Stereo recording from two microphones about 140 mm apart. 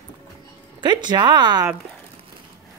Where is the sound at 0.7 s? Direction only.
30° right (ahead or behind).